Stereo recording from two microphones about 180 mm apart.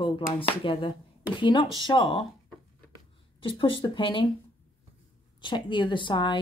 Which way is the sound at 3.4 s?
30° left (ahead or behind).